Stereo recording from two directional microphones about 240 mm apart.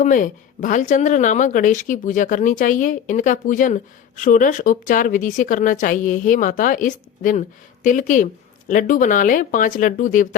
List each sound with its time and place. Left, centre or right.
0.0 s speech: left